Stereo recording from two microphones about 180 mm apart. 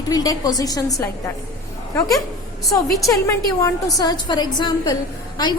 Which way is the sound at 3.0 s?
15° left (ahead or behind).